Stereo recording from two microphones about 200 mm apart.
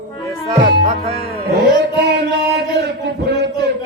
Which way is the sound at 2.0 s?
60° right (ahead or behind).